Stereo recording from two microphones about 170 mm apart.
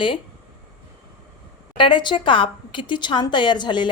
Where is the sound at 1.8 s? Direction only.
30° left (ahead or behind).